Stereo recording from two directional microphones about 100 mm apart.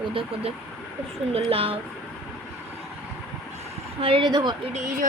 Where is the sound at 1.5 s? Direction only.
70° right (ahead or behind).